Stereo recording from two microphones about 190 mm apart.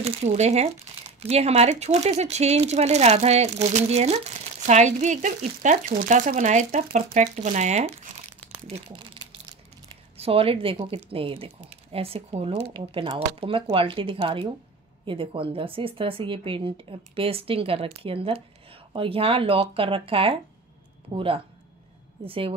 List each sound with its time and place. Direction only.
0.0 s speech: 35° right (ahead or behind)
8.6 s a sound: 30° right (ahead or behind)
10.1 s speech: 30° right (ahead or behind)